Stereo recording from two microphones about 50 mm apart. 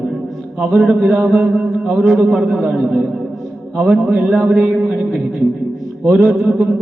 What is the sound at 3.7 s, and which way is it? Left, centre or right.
Speech, centre.